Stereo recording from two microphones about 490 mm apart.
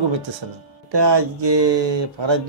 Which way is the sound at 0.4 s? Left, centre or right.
Right.